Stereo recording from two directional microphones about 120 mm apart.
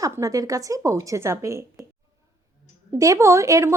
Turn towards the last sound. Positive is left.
turn(degrees=-25)  # may be behind; listen again after turning